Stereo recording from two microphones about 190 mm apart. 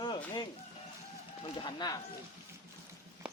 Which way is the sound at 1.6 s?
20° left (ahead or behind).